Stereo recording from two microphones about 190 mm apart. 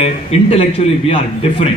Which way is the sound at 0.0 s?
35° left (ahead or behind).